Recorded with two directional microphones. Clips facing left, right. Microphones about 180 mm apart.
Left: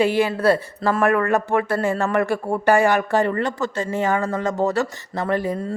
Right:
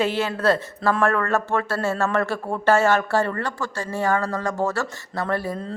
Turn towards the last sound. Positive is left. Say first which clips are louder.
# left 3 dB
turn(degrees=15)  # may be behind; listen again after turning